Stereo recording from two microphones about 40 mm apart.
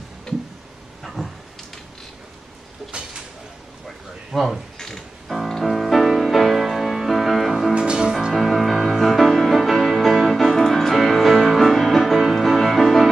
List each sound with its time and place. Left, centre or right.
1.0 s a sound: centre
4.3 s speech: centre
4.7 s music: centre
7.7 s music: right
8.1 s music: centre